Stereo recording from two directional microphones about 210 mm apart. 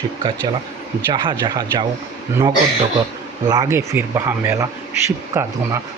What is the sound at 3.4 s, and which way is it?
A man's voice, 20° right (ahead or behind).